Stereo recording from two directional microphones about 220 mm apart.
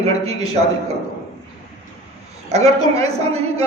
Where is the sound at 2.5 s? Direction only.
30° right (ahead or behind).